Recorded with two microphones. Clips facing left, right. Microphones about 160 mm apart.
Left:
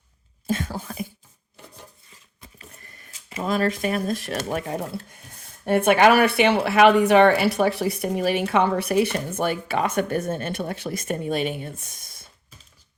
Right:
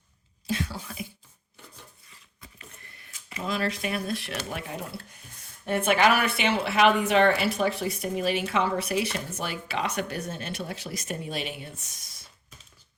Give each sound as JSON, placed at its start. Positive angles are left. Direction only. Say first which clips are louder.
{"t": 0.4, "sound": "a sound", "louder": "left 4 dB", "side_deg": 45}
{"t": 2.6, "sound": "speech", "louder": "left 4 dB", "side_deg": 35}
{"t": 5.6, "sound": "speech", "louder": "left 6 dB", "side_deg": 55}